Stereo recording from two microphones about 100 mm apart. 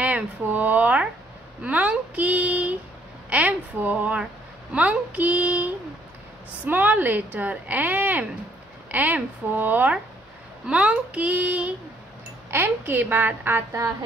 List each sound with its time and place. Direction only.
0.0 s a woman's voice: 15° right (ahead or behind)